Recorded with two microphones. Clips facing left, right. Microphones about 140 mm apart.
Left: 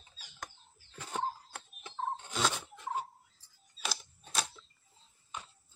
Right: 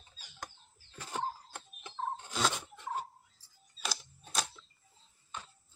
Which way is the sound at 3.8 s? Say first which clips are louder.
Even; centre (ahead or behind).